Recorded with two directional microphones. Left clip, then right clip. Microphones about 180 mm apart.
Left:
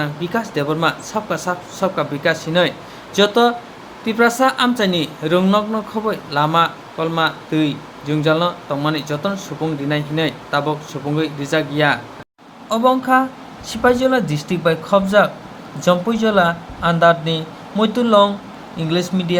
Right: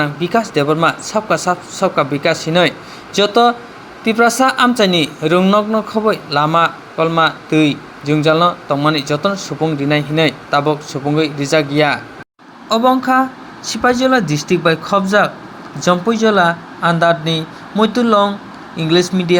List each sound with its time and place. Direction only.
0.0 s speech: 20° right (ahead or behind)